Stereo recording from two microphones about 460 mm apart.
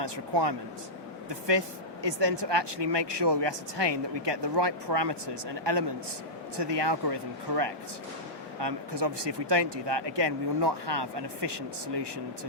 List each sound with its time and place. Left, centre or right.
0.0 s speech: right